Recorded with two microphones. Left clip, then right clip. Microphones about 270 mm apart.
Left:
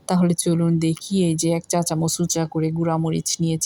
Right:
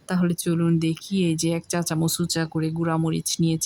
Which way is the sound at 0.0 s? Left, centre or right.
Centre.